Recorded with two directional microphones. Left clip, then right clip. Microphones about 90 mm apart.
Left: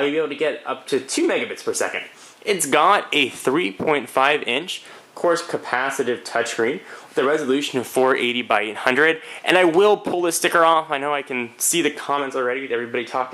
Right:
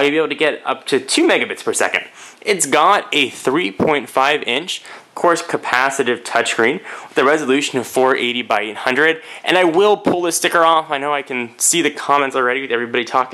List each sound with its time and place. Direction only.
0.0 s speech: 45° right (ahead or behind)
2.4 s speech: 10° right (ahead or behind)
5.2 s speech: 20° right (ahead or behind)
6.3 s speech: 35° right (ahead or behind)
7.2 s speech: 20° right (ahead or behind)
12.1 s speech: 25° right (ahead or behind)
12.4 s speech: 50° right (ahead or behind)